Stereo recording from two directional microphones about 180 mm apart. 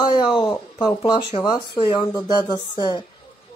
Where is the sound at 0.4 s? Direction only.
25° left (ahead or behind).